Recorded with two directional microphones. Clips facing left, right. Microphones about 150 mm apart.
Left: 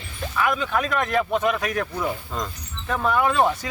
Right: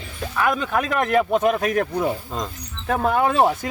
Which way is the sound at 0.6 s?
45° right (ahead or behind).